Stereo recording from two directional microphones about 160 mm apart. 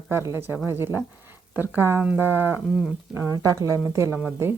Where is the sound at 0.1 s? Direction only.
15° right (ahead or behind).